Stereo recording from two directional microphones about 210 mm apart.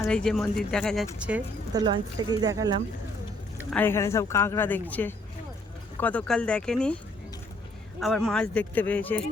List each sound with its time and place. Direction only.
0.1 s speech: 5° left (ahead or behind)
1.7 s speech: 20° right (ahead or behind)
3.7 s speech: 10° left (ahead or behind)
8.0 s speech: centre (ahead or behind)